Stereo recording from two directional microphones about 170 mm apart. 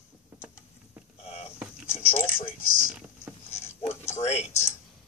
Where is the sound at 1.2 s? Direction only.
40° left (ahead or behind).